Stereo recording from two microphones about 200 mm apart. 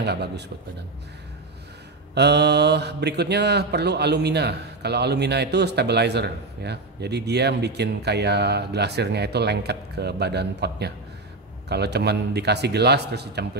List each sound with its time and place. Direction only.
0.0 s speech: 55° right (ahead or behind)
2.1 s speech: 55° right (ahead or behind)